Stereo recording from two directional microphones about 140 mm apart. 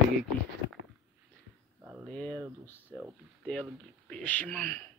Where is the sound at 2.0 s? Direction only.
5° left (ahead or behind).